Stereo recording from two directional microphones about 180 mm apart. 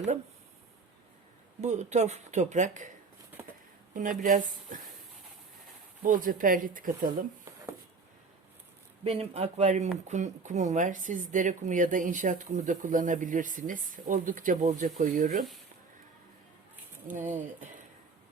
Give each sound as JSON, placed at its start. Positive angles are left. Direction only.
{"t": 1.6, "sound": "speech", "side_deg": -40}
{"t": 3.9, "sound": "speech", "side_deg": -45}
{"t": 6.0, "sound": "speech", "side_deg": -50}
{"t": 9.0, "sound": "speech", "side_deg": -35}